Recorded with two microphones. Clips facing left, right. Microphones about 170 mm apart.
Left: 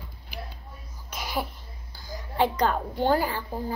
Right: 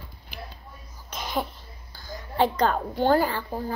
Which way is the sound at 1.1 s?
10° left (ahead or behind).